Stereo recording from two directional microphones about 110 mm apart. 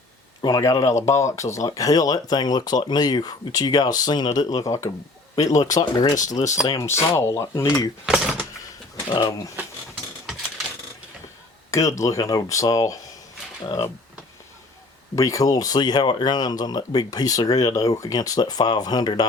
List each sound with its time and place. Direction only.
0.4 s speech: 30° left (ahead or behind)
6.7 s speech: 25° left (ahead or behind)
8.0 s a sound: 5° right (ahead or behind)
11.7 s speech: 30° left (ahead or behind)
15.1 s speech: 30° left (ahead or behind)